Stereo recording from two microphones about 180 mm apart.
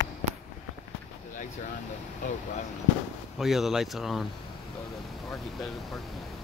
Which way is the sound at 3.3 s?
Centre (ahead or behind).